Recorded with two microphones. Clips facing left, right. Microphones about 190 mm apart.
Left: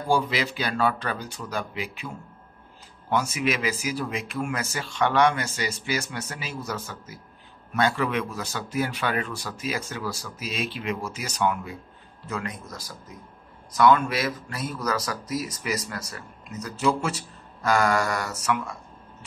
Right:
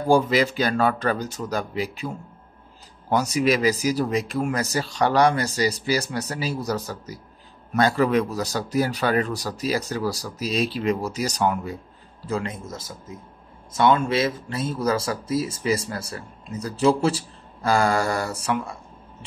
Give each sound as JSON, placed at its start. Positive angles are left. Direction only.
{"t": 0.1, "sound": "speech", "side_deg": -45}